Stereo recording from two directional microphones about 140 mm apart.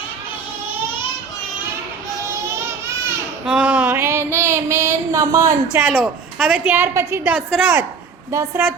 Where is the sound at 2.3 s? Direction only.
20° right (ahead or behind).